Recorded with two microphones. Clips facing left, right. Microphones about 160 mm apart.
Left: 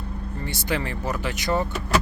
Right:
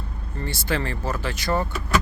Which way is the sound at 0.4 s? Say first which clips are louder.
Right 1 dB; 15° left (ahead or behind).